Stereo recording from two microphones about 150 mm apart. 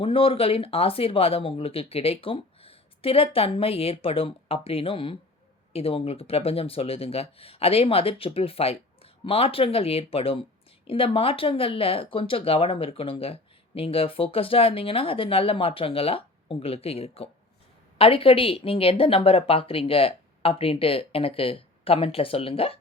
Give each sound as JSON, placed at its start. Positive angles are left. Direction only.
{"t": 0.0, "sound": "speech", "side_deg": 40}